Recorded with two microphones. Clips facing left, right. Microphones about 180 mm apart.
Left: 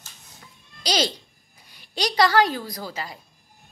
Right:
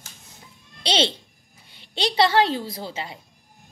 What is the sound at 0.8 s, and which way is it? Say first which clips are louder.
A woman's voice: right 1 dB; 25° right (ahead or behind).